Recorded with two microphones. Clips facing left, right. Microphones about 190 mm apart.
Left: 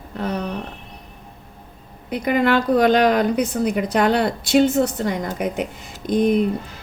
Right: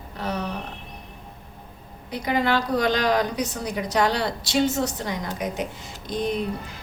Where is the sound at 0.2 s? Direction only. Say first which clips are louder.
Left 4 dB; 55° left (ahead or behind).